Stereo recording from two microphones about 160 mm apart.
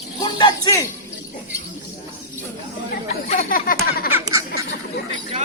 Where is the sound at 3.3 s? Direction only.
65° left (ahead or behind).